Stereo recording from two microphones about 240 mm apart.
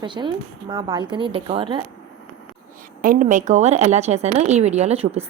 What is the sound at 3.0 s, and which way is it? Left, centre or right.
A woman's voice, right.